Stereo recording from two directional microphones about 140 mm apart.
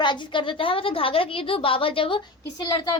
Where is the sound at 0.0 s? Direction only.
35° left (ahead or behind).